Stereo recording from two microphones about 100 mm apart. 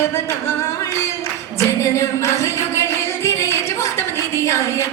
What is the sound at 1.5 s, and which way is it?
Music, 30° left (ahead or behind).